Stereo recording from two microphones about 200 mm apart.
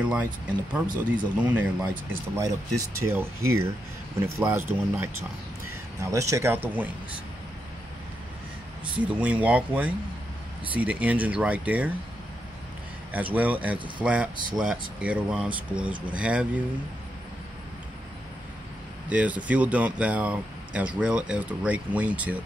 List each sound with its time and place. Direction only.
0.0 s speech: 5° right (ahead or behind)
9.0 s speech: 5° right (ahead or behind)
13.1 s speech: 10° right (ahead or behind)
19.0 s speech: 5° right (ahead or behind)